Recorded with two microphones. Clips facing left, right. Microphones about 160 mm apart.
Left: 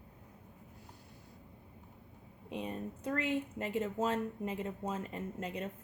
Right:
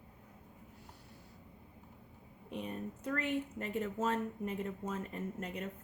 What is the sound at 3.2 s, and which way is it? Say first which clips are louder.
Speech: left 1 dB; 90° left.